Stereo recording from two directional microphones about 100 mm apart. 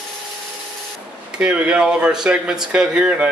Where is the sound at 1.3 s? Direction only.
15° right (ahead or behind).